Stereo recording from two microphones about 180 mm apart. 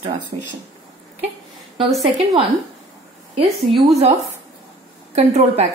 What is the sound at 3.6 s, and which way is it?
Speech, centre (ahead or behind).